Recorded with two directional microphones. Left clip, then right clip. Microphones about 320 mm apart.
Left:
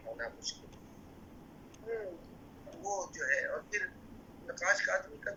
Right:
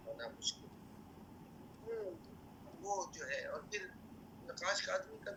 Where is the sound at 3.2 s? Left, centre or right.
Centre.